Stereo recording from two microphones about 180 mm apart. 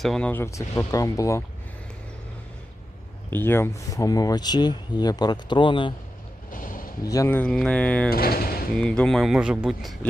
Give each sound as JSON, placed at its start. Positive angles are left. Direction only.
{"t": 0.0, "sound": "speech", "side_deg": 5}
{"t": 3.2, "sound": "speech", "side_deg": 10}
{"t": 6.5, "sound": "a sound", "side_deg": 50}
{"t": 7.0, "sound": "speech", "side_deg": 20}
{"t": 8.1, "sound": "speech", "side_deg": 55}
{"t": 8.7, "sound": "speech", "side_deg": 5}